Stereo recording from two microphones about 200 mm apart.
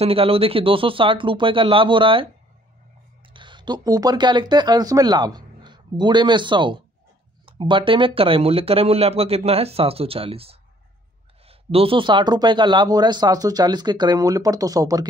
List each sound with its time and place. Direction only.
0.0 s speech: 30° right (ahead or behind)
3.3 s speech: 25° right (ahead or behind)